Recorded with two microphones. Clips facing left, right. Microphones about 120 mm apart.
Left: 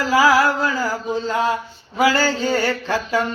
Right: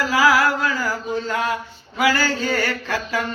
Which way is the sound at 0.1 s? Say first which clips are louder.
Left 3 dB; 30° left (ahead or behind).